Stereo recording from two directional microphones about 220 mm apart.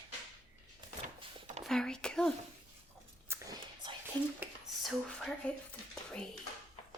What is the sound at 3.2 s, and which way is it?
Whispering, 15° right (ahead or behind).